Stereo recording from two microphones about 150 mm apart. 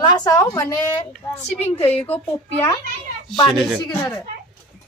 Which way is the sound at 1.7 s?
40° left (ahead or behind).